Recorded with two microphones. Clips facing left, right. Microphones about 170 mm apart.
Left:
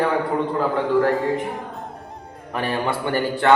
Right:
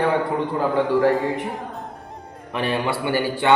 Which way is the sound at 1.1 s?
Centre (ahead or behind).